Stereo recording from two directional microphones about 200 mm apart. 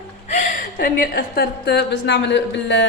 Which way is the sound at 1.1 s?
50° left (ahead or behind).